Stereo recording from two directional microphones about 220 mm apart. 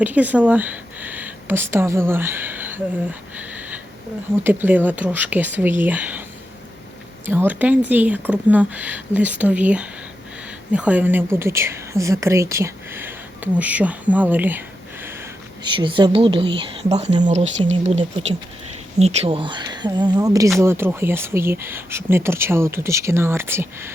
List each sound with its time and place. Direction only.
0.0 s speech: 5° right (ahead or behind)
4.4 s a woman's voice: 10° right (ahead or behind)
7.3 s a woman's voice: 10° right (ahead or behind)
15.6 s a woman's voice: 20° right (ahead or behind)